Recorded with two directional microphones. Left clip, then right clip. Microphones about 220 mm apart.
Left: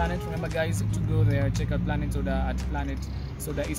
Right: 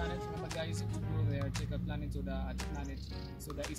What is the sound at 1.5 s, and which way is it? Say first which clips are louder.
Speech: left 11 dB; 10° left (ahead or behind).